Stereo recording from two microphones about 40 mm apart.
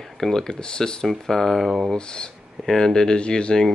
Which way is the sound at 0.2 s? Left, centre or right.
Centre.